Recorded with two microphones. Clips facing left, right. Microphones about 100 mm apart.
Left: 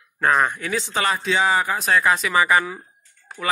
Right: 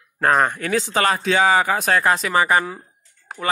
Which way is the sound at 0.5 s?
55° right (ahead or behind).